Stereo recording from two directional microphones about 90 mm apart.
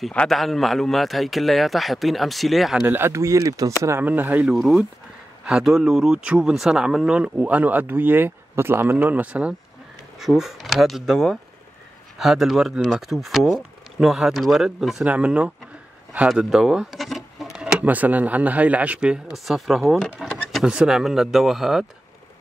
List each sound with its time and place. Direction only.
0.1 s a man's voice: 10° left (ahead or behind)
0.4 s a man's voice: centre (ahead or behind)
2.9 s speech: 30° right (ahead or behind)
4.0 s speech: 20° right (ahead or behind)
4.6 s a man's voice: centre (ahead or behind)
15.0 s speech: 15° right (ahead or behind)
16.3 s a man's voice: 5° right (ahead or behind)
20.2 s pigeon: 10° left (ahead or behind)
20.6 s a man's voice: 10° right (ahead or behind)